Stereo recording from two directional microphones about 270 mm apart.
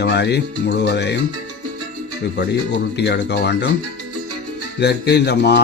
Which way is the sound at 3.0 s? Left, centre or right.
Left.